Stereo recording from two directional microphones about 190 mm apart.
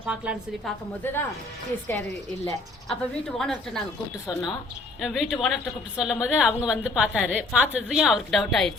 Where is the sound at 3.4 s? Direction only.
Centre (ahead or behind).